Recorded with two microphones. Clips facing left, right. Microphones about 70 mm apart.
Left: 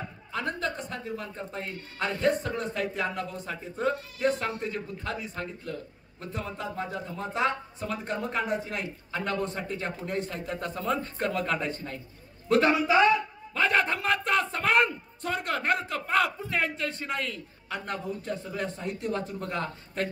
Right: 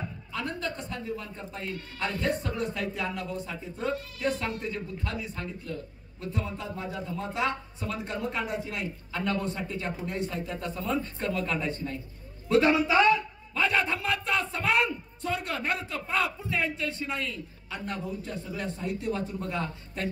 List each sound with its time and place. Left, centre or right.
0.3 s speech: left
2.1 s a man's voice: left
13.6 s a sound: left